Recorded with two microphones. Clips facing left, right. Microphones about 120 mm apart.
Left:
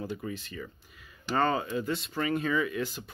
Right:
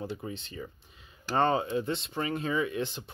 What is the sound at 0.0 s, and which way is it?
Speech, 30° right (ahead or behind).